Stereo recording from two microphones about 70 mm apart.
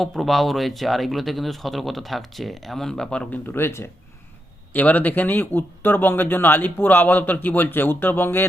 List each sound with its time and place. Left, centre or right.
0.0 s speech: centre
3.4 s speech: left
4.7 s speech: left